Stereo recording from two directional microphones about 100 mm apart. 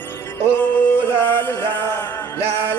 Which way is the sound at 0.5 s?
15° left (ahead or behind).